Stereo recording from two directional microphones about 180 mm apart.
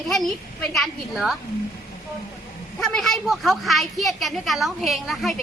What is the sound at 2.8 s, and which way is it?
Speech, 5° left (ahead or behind).